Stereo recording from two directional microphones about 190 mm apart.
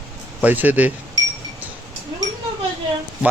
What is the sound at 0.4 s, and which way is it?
Speech, 10° right (ahead or behind).